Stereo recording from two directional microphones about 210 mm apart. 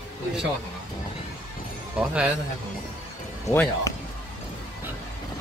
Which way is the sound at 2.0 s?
5° right (ahead or behind).